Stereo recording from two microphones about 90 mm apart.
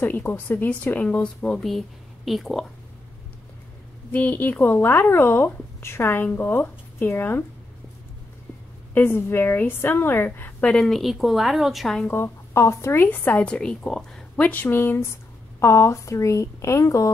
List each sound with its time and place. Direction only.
0.0 s a woman's voice: 20° left (ahead or behind); by 2.6 s centre (ahead or behind)
4.1 s speech: 20° left (ahead or behind)
8.9 s speech: 25° left (ahead or behind)
10.6 s a woman's voice: 10° left (ahead or behind)
12.1 s speech: 30° left (ahead or behind)